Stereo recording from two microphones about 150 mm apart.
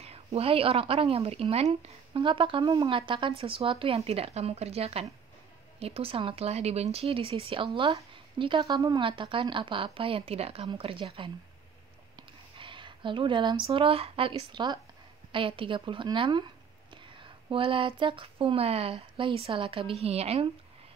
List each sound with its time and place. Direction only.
0.0 s speech: 40° right (ahead or behind)